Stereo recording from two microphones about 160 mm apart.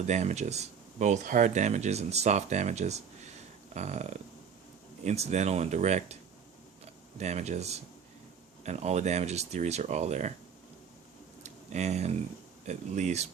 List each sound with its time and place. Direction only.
0.0 s speech: 45° right (ahead or behind)
7.2 s speech: 45° right (ahead or behind)
11.4 s a sound: 45° right (ahead or behind)
12.6 s speech: 45° right (ahead or behind)